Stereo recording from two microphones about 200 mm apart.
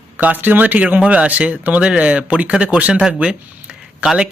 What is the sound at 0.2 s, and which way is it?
Speech, 10° right (ahead or behind).